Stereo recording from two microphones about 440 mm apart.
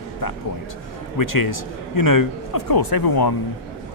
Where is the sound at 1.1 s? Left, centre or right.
Left.